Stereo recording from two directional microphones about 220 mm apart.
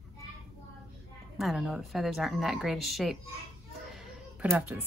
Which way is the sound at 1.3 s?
Centre (ahead or behind).